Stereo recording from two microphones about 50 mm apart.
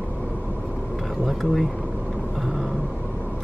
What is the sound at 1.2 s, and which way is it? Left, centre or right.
Speech, centre.